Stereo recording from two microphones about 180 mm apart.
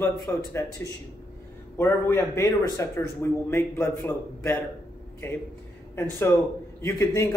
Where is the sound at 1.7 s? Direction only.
15° left (ahead or behind).